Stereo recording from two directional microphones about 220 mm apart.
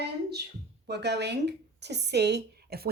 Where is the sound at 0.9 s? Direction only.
50° right (ahead or behind).